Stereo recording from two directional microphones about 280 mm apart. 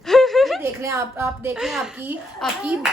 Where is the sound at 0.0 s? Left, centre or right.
Centre.